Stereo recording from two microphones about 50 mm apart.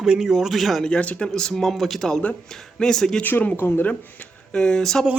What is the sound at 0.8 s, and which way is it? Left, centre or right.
Speech, left.